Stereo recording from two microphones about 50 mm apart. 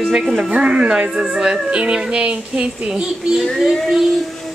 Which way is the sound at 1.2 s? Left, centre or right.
Centre.